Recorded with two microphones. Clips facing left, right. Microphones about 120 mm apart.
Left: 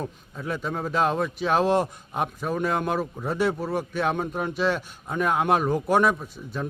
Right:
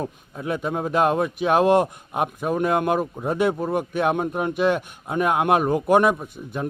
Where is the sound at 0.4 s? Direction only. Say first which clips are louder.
Right 4 dB; 55° right (ahead or behind).